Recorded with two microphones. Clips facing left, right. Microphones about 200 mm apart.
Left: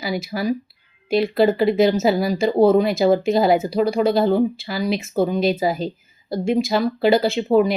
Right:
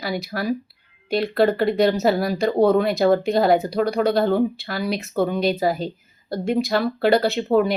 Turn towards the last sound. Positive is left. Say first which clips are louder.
# left 1 dB
turn(degrees=0)  # may be behind; listen again after turning